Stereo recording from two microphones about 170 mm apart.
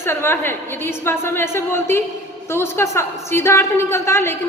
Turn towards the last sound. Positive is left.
turn(degrees=15)  # may be behind; listen again after turning